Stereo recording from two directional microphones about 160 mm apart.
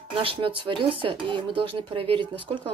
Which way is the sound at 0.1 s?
35° right (ahead or behind).